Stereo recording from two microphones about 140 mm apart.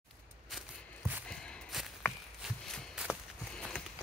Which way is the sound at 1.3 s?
Centre (ahead or behind).